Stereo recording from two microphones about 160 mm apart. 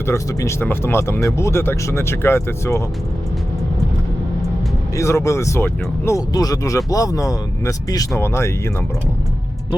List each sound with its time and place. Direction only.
0.1 s speech: 15° left (ahead or behind)
4.9 s speech: 20° left (ahead or behind)